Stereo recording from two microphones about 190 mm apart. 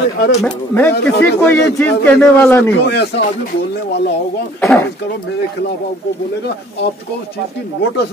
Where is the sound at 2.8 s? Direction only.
60° left (ahead or behind).